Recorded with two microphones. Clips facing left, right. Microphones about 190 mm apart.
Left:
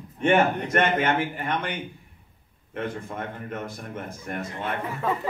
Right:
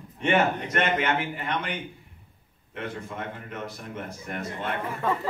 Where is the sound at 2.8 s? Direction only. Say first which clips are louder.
Left 1 dB; 50° left (ahead or behind).